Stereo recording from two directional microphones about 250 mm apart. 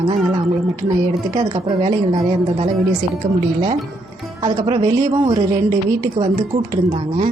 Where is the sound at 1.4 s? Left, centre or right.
Centre.